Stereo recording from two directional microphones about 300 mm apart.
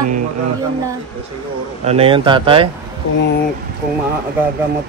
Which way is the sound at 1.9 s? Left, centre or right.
Centre.